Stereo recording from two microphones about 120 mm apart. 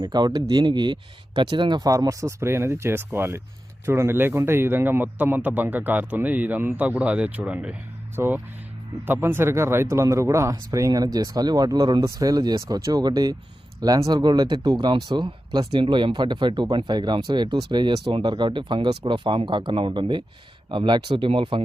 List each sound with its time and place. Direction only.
0.0 s speech: 35° right (ahead or behind)